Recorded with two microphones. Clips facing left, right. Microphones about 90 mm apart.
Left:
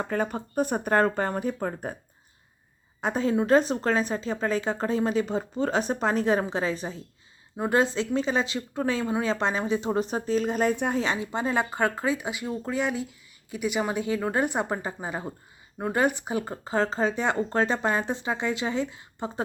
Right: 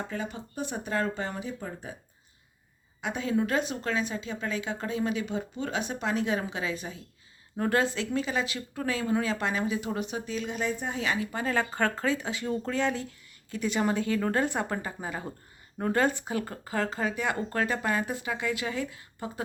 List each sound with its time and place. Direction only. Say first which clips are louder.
0.1 s speech: left 7 dB; 50° left (ahead or behind)
3.0 s speech: left 4 dB; 35° left (ahead or behind)
7.5 s speech: left 3 dB; 15° left (ahead or behind)
7.9 s speech: left 4 dB; 30° left (ahead or behind); by 10.8 s 45° left (ahead or behind)
10.9 s speech: left 3 dB; 30° left (ahead or behind)